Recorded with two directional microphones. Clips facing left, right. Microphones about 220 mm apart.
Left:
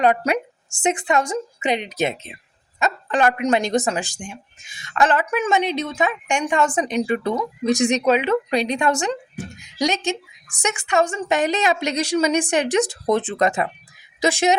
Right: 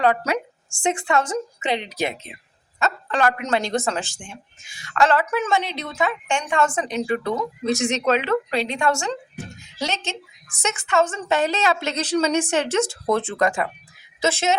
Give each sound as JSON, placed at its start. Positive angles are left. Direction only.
{"t": 0.0, "sound": "a woman's voice", "side_deg": 20}